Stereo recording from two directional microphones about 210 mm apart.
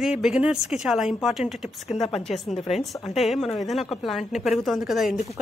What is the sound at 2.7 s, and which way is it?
A woman's voice, centre (ahead or behind).